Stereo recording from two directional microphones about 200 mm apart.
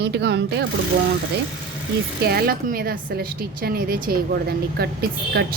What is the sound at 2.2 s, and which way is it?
Speech, 50° right (ahead or behind).